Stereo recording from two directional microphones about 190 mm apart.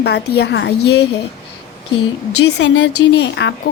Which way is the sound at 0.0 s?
60° left (ahead or behind).